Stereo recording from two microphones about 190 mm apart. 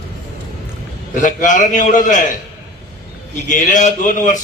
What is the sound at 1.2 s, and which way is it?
A man's voice, 40° left (ahead or behind).